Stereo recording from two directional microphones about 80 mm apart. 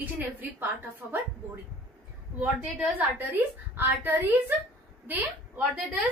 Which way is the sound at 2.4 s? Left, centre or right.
Centre.